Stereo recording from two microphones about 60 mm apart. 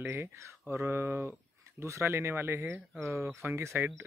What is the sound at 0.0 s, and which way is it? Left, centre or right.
Speech, right.